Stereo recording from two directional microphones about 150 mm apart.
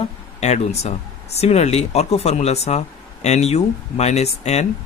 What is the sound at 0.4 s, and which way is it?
Speech, 45° left (ahead or behind).